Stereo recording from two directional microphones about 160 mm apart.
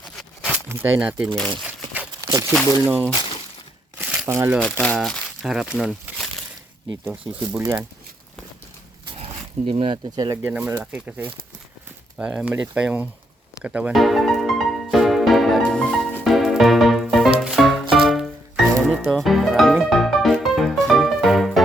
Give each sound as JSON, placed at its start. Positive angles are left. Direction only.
{"t": 0.2, "sound": "a sound", "side_deg": 0}
{"t": 0.7, "sound": "speech", "side_deg": -10}
{"t": 1.4, "sound": "speech", "side_deg": 5}
{"t": 2.2, "sound": "a sound", "side_deg": -20}
{"t": 3.1, "sound": "a sound", "side_deg": 30}
{"t": 3.9, "sound": "crumpling", "side_deg": -5}
{"t": 4.3, "sound": "speech", "side_deg": -15}
{"t": 4.8, "sound": "speech", "side_deg": 5}
{"t": 7.6, "sound": "speech", "side_deg": -20}
{"t": 9.1, "sound": "dog", "side_deg": -40}
{"t": 10.2, "sound": "speech", "side_deg": -20}
{"t": 13.6, "sound": "music", "side_deg": -5}